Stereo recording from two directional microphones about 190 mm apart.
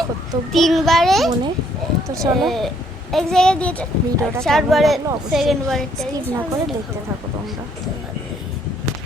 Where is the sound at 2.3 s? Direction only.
Centre (ahead or behind).